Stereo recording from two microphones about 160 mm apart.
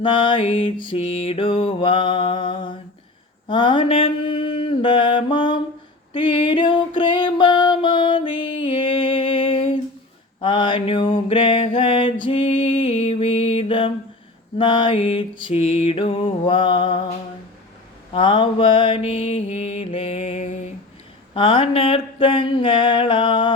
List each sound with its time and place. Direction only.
0.0 s mantra: 30° left (ahead or behind)
6.1 s music: 30° left (ahead or behind)
10.4 s a sound: 30° left (ahead or behind)
14.6 s mantra: 30° left (ahead or behind)
18.1 s mantra: 30° left (ahead or behind)